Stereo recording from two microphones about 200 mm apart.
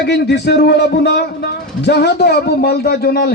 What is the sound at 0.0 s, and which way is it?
A man's voice, 55° left (ahead or behind).